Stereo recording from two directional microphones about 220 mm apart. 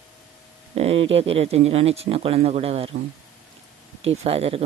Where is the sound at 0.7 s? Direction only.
25° right (ahead or behind).